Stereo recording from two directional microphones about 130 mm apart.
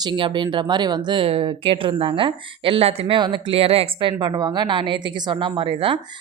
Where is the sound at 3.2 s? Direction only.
35° right (ahead or behind).